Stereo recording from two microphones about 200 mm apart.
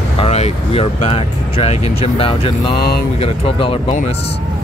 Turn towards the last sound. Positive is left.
turn(degrees=25)  # may be behind; listen again after turning